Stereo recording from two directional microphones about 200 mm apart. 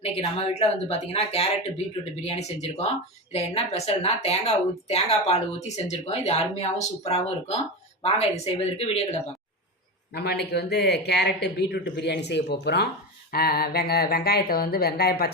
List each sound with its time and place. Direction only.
0.0 s a woman's voice: 30° left (ahead or behind)
8.8 s speech: 30° left (ahead or behind)
10.1 s speech: 55° left (ahead or behind)